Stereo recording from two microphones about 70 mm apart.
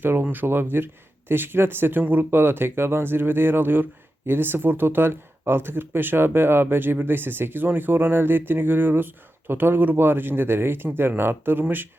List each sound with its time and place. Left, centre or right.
0.0 s speech: right